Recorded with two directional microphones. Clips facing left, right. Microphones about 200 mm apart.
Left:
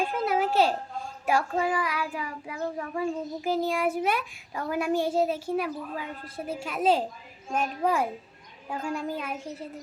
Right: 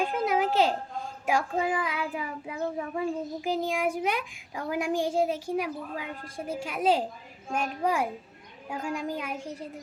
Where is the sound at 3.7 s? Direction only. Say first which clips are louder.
Left 2 dB; 15° right (ahead or behind).